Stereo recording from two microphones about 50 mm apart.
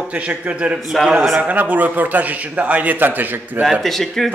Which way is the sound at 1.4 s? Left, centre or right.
Right.